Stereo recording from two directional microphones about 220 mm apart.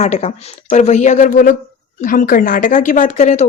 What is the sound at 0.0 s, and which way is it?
Speech, 30° left (ahead or behind).